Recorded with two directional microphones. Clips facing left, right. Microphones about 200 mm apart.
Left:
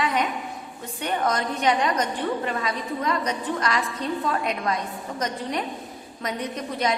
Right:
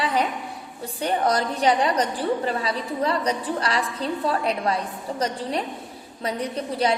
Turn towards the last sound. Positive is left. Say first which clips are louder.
# right 3 dB
turn(degrees=-30)  # may be behind; listen again after turning